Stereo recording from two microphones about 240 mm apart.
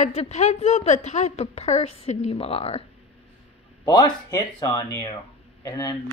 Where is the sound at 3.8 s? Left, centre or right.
Centre.